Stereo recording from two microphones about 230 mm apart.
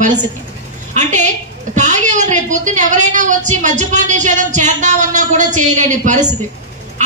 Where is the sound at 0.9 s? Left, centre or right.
Right.